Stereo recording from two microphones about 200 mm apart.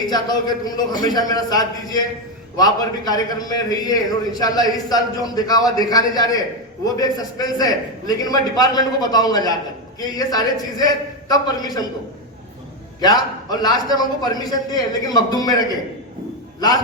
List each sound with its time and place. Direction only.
0.1 s a man's voice: 20° left (ahead or behind)
13.0 s a man's voice: 20° left (ahead or behind)